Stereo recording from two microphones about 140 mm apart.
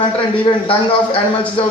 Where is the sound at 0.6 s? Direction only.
40° left (ahead or behind).